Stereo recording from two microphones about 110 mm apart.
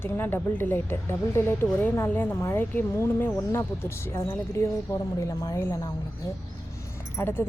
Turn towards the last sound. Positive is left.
turn(degrees=20)  # may be behind; listen again after turning